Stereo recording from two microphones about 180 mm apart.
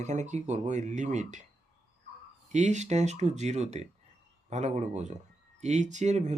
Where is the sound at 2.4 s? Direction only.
40° right (ahead or behind).